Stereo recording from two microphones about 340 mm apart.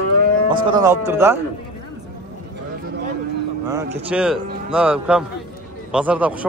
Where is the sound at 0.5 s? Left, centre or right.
Centre.